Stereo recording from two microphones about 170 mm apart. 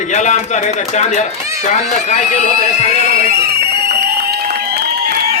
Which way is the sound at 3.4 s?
65° right (ahead or behind).